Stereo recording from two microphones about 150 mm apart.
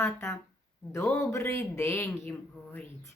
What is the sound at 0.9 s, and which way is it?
Speech, 20° left (ahead or behind).